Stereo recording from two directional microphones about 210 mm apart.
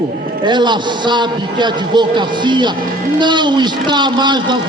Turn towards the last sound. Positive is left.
turn(degrees=-20)  # may be behind; listen again after turning